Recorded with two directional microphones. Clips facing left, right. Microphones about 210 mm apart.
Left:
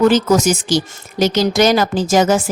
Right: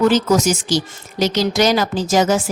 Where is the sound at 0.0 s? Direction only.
50° left (ahead or behind).